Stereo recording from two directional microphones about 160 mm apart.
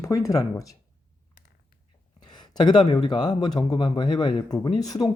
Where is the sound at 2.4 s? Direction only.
25° left (ahead or behind).